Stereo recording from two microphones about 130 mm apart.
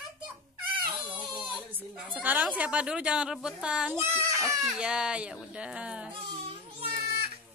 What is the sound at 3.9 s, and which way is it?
Speech, 20° right (ahead or behind).